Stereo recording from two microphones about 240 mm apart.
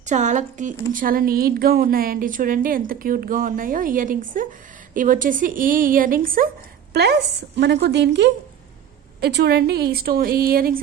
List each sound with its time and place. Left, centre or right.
0.0 s a woman's voice: right